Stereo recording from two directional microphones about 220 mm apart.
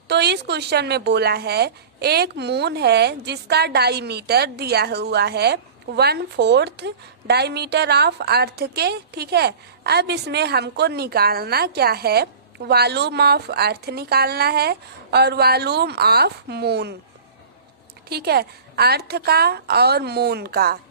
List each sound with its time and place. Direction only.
0.1 s speech: 50° right (ahead or behind)
18.1 s speech: 45° right (ahead or behind)